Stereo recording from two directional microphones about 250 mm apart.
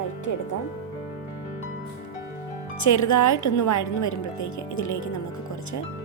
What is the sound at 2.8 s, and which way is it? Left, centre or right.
A woman's voice, left.